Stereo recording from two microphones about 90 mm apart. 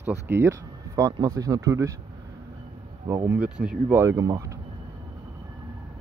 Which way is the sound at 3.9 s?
35° right (ahead or behind).